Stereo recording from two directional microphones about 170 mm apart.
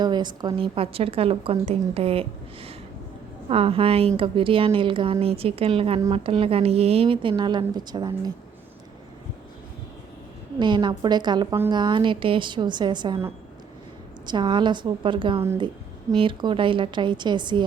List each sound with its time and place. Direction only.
0.0 s a woman's voice: 25° right (ahead or behind)
3.5 s a woman's voice: 35° right (ahead or behind)
10.6 s speech: 25° right (ahead or behind)
14.3 s speech: 25° right (ahead or behind)